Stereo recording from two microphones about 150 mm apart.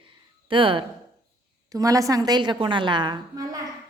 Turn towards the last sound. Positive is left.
turn(degrees=-30)  # may be behind; listen again after turning